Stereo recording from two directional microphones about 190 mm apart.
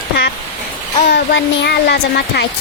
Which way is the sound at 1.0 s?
60° left (ahead or behind).